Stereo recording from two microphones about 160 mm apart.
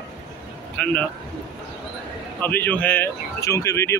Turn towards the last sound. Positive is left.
turn(degrees=20)  # may be behind; listen again after turning